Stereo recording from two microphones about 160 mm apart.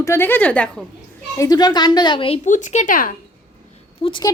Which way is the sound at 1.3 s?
25° left (ahead or behind).